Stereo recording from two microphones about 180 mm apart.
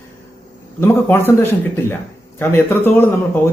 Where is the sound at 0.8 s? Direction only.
15° left (ahead or behind).